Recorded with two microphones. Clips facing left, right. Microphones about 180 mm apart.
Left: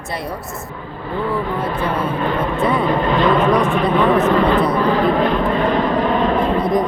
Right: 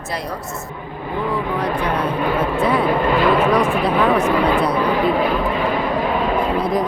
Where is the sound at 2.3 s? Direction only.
Centre (ahead or behind).